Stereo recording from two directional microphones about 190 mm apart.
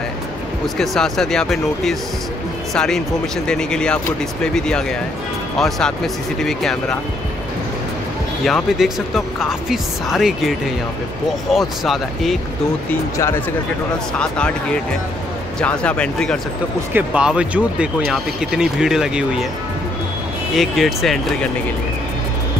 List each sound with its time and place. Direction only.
0.7 s speech: centre (ahead or behind)
8.5 s speech: centre (ahead or behind)
11.5 s speech: centre (ahead or behind)
14.2 s speech: 5° left (ahead or behind)
20.5 s speech: centre (ahead or behind)